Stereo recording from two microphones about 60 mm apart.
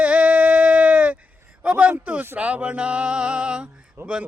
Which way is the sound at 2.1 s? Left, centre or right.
Right.